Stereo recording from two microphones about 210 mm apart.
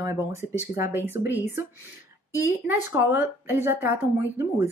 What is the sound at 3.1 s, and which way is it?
Speech, 10° right (ahead or behind).